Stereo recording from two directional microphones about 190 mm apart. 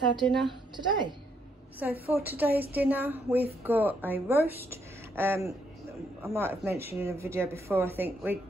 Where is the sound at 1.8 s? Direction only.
10° right (ahead or behind).